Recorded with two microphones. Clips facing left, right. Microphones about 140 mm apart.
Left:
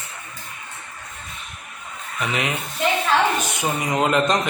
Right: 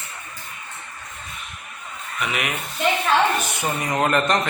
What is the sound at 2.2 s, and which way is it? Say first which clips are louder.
Speech: left 2 dB; 30° left (ahead or behind).